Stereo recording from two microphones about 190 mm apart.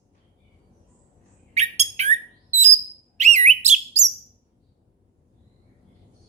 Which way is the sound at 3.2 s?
35° right (ahead or behind).